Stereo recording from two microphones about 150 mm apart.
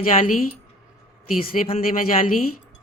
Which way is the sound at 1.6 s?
50° left (ahead or behind).